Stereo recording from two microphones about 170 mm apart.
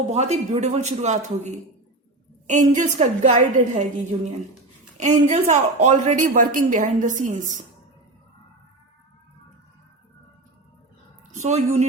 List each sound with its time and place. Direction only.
0.1 s a woman's voice: 40° right (ahead or behind)
4.9 s a woman's voice: 45° right (ahead or behind)
11.3 s a woman's voice: 40° right (ahead or behind)